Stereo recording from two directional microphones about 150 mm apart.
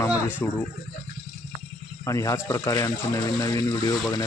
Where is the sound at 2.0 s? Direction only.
20° left (ahead or behind).